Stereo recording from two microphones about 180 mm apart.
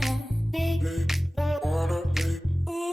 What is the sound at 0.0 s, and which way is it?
Music, centre (ahead or behind).